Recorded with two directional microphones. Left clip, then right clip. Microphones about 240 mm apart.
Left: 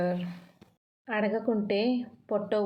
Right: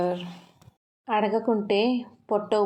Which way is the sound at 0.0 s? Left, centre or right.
Right.